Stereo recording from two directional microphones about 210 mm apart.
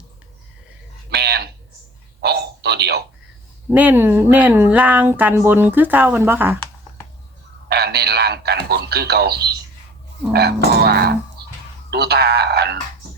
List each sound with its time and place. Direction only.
1.1 s a sound: 50° right (ahead or behind)
3.7 s speech: 5° right (ahead or behind)
7.7 s speech: 50° right (ahead or behind)